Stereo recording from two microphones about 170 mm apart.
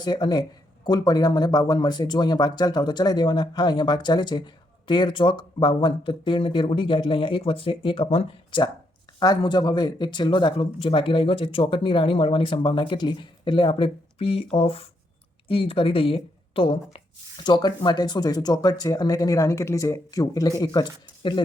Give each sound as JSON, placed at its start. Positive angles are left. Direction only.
{"t": 0.0, "sound": "speech", "side_deg": 25}